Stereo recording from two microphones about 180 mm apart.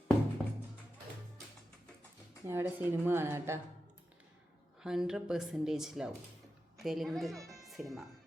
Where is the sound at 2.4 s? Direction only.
15° right (ahead or behind).